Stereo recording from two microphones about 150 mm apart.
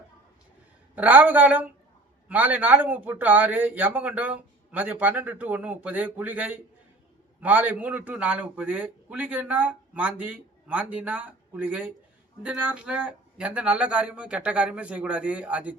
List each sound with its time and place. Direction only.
0.9 s a man's voice: 10° right (ahead or behind)